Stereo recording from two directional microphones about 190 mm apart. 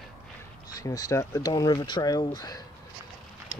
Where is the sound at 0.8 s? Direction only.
20° left (ahead or behind).